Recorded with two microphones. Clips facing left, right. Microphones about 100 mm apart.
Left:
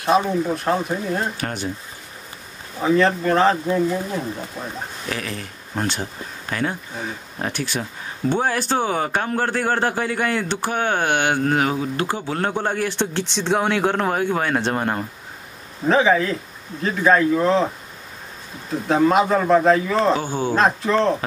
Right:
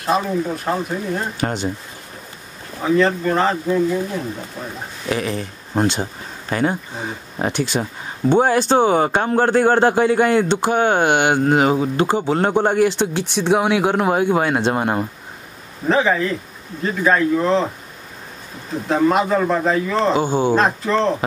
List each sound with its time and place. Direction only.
0.3 s speech: centre (ahead or behind)
1.4 s a man's voice: 25° right (ahead or behind)
2.8 s speech: centre (ahead or behind)
5.1 s a man's voice: 20° right (ahead or behind)
15.9 s speech: centre (ahead or behind)
18.9 s speech: centre (ahead or behind)
20.2 s a man's voice: 20° right (ahead or behind)
20.5 s speech: centre (ahead or behind)